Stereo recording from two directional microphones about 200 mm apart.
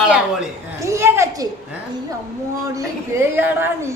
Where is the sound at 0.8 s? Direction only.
15° right (ahead or behind).